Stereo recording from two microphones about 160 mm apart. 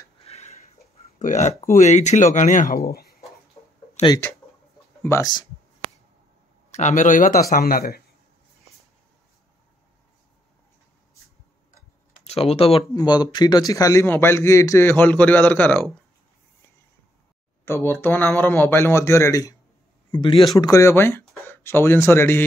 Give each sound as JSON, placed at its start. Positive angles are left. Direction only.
{"t": 0.2, "sound": "a sound", "side_deg": 40}
{"t": 1.7, "sound": "speech", "side_deg": 50}
{"t": 2.8, "sound": "speech", "side_deg": 75}
{"t": 4.1, "sound": "a man's voice", "side_deg": 20}
{"t": 6.7, "sound": "speech", "side_deg": 50}
{"t": 12.3, "sound": "speech", "side_deg": 40}
{"t": 12.9, "sound": "a man's voice", "side_deg": 25}
{"t": 17.6, "sound": "a man's voice", "side_deg": 15}
{"t": 20.1, "sound": "speech", "side_deg": 30}
{"t": 20.5, "sound": "a man's voice", "side_deg": 20}